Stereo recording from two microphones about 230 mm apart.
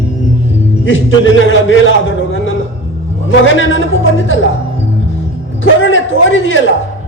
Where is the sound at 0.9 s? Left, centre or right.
Left.